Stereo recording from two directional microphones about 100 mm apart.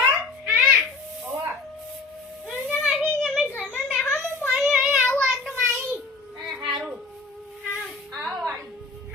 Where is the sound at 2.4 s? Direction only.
15° left (ahead or behind).